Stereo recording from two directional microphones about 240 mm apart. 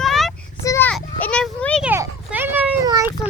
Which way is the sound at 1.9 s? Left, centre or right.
Centre.